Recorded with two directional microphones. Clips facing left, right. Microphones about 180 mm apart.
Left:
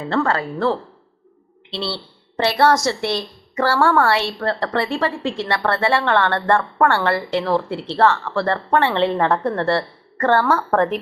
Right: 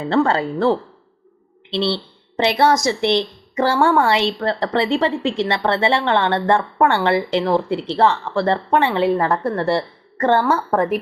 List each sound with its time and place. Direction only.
0.1 s speech: 25° right (ahead or behind); by 9.6 s 5° right (ahead or behind)
9.7 s a woman's voice: 15° right (ahead or behind)